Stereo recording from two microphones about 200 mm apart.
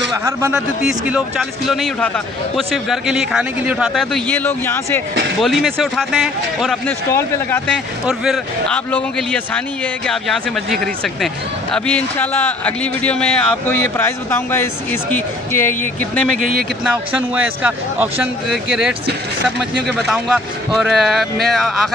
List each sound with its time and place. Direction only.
0.1 s a man's voice: 15° right (ahead or behind); by 5.0 s 10° left (ahead or behind)
5.4 s a man's voice: centre (ahead or behind)
7.1 s a man's voice: 10° left (ahead or behind)
16.3 s speech: 45° right (ahead or behind)
16.8 s a man's voice: 5° right (ahead or behind)
20.1 s a man's voice: centre (ahead or behind)